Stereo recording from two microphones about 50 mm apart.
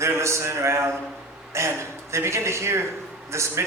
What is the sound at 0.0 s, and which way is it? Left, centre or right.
Speech, right.